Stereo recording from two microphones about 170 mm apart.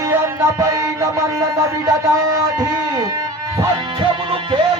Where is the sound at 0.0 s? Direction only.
15° right (ahead or behind).